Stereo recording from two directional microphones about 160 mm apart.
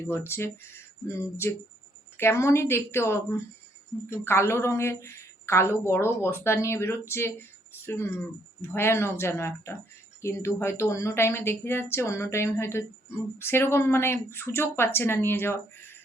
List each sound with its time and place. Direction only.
0.0 s a woman's voice: 15° left (ahead or behind)